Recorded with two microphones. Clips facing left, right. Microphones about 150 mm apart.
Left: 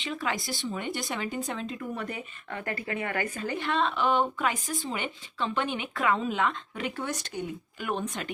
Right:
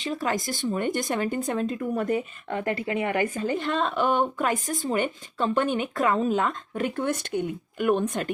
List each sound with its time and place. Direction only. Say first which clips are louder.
0.0 s speech: right 5 dB; 40° right (ahead or behind)
2.5 s speech: right 6 dB; 30° right (ahead or behind)
3.5 s speech: right 3 dB; 45° right (ahead or behind)